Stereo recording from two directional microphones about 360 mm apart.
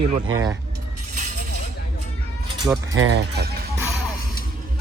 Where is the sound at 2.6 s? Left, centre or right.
Centre.